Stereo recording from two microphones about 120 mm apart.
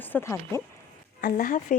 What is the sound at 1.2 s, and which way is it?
Speech, 90° left.